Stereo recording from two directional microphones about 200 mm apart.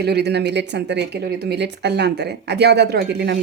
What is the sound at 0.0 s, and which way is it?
Speech, 55° right (ahead or behind).